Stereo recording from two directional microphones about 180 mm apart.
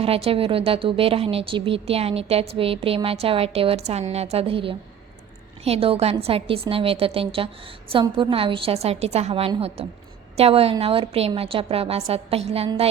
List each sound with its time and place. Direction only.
0.0 s speech: 30° right (ahead or behind)